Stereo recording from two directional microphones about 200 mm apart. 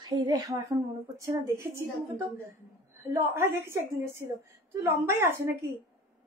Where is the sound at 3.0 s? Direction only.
15° right (ahead or behind).